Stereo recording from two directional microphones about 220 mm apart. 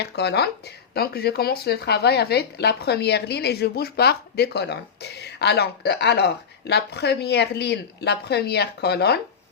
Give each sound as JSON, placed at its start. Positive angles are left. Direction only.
{"t": 0.0, "sound": "speech", "side_deg": 50}